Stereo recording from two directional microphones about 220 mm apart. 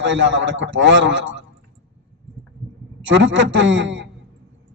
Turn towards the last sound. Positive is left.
turn(degrees=-55)  # may be behind; listen again after turning